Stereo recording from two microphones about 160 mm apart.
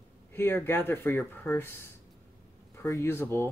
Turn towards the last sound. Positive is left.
turn(degrees=15)  # may be behind; listen again after turning